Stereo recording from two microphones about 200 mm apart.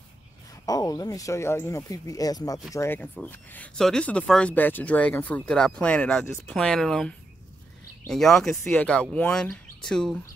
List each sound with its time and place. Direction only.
0.7 s speech: 20° left (ahead or behind)